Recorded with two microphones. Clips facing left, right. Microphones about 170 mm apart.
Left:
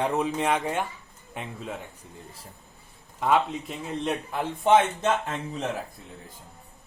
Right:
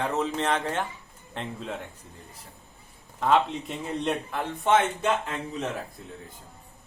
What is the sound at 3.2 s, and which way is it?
Speech, 5° left (ahead or behind).